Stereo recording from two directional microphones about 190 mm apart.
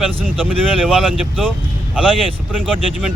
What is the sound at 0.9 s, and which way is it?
Speech, centre (ahead or behind).